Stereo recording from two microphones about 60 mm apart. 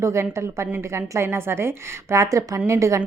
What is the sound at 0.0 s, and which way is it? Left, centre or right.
A woman's voice, right.